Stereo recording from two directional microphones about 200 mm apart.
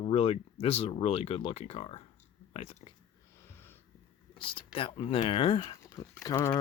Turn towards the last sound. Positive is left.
turn(degrees=20)  # may be behind; listen again after turning